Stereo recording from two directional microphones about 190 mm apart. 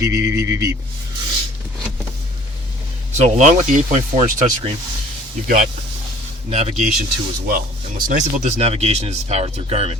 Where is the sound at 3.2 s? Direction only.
35° right (ahead or behind).